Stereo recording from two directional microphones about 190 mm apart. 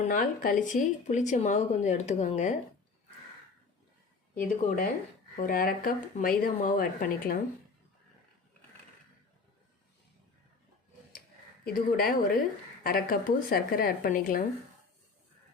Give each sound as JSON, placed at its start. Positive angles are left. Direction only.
{"t": 0.0, "sound": "speech", "side_deg": 40}
{"t": 4.4, "sound": "speech", "side_deg": 45}
{"t": 11.6, "sound": "speech", "side_deg": 50}